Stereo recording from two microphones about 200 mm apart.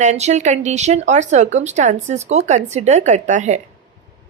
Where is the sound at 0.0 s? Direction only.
35° right (ahead or behind).